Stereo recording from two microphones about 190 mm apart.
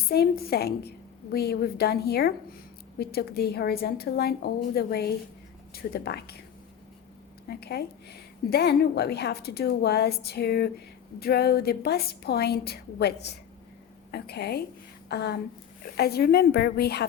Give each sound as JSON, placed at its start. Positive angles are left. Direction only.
{"t": 0.1, "sound": "a woman's voice", "side_deg": 55}
{"t": 7.4, "sound": "a woman's voice", "side_deg": 55}